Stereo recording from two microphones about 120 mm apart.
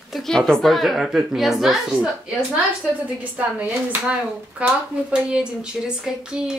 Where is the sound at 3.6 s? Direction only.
15° right (ahead or behind).